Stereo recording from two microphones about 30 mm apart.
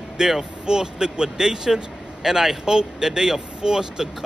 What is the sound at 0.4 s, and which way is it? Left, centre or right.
Speech, right.